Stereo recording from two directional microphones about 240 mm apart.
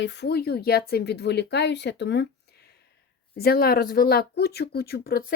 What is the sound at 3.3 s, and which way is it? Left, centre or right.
Speech, left.